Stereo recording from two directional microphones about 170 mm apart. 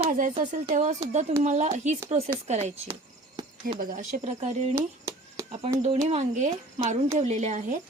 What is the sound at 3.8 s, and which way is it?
Speech, 55° right (ahead or behind).